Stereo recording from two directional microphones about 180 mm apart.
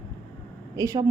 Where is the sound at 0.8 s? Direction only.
20° right (ahead or behind).